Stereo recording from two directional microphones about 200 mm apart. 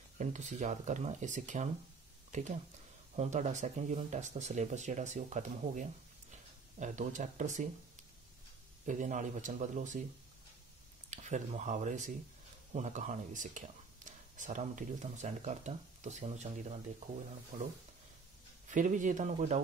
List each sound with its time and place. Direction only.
0.2 s speech: 35° right (ahead or behind)
3.2 s speech: 35° right (ahead or behind)
8.8 s speech: 40° right (ahead or behind)
11.1 s speech: 35° right (ahead or behind)
18.7 s speech: 40° right (ahead or behind)